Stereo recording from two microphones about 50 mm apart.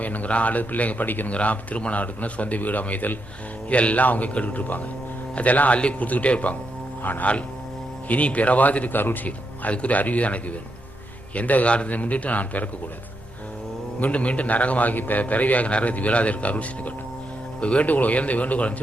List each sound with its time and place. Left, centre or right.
0.0 s speech: left
1.3 s a man's voice: left
7.0 s a man's voice: left
14.0 s a man's voice: left